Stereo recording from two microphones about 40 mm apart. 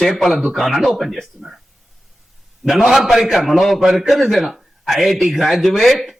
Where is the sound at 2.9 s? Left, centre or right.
Centre.